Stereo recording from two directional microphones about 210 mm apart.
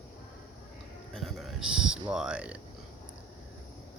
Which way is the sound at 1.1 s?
Centre (ahead or behind).